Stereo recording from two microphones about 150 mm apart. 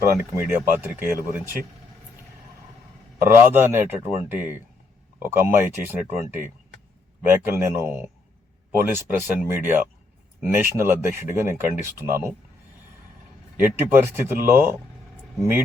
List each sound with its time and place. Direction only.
0.0 s speech: 15° right (ahead or behind)
3.2 s speech: 15° right (ahead or behind)
7.3 s speech: 15° right (ahead or behind)
13.6 s speech: 15° right (ahead or behind)